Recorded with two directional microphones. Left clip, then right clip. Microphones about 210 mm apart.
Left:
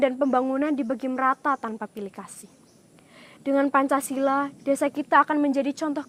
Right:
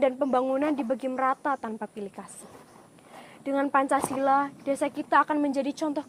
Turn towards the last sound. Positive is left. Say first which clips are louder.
# left 2 dB
turn(degrees=30)  # may be behind; listen again after turning